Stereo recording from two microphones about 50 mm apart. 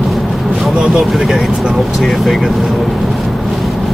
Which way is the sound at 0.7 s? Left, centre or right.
Centre.